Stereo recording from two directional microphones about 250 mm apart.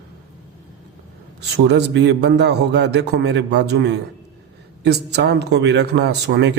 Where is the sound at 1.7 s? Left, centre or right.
Right.